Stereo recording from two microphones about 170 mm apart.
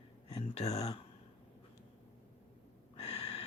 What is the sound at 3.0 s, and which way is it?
Gasp, 35° left (ahead or behind).